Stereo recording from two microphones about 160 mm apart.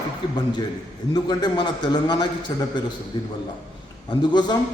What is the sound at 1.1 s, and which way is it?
A man's voice, 25° left (ahead or behind).